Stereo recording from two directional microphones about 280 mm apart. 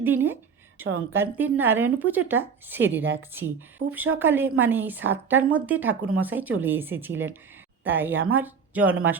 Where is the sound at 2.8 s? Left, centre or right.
Right.